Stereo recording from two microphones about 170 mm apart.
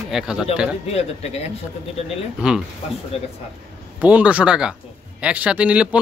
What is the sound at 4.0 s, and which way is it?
A man's voice, 10° right (ahead or behind).